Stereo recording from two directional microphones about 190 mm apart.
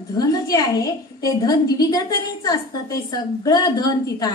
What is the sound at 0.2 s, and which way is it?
A woman's voice, 20° left (ahead or behind).